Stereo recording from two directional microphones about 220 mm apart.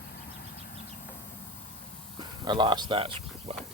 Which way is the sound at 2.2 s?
20° right (ahead or behind).